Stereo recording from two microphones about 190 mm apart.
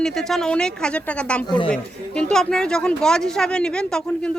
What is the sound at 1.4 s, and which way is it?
Speech, 25° left (ahead or behind).